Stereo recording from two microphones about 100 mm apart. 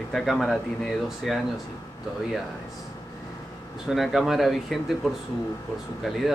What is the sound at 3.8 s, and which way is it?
Speech, centre (ahead or behind).